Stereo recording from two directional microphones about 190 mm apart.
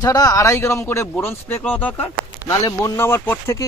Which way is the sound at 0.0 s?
20° left (ahead or behind).